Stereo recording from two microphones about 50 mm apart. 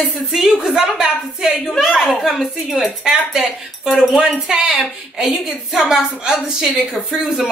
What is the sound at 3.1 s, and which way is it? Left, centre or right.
Speech, centre.